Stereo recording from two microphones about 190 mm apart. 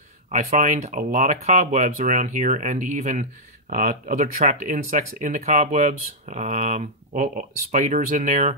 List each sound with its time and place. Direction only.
0.3 s speech: 40° right (ahead or behind)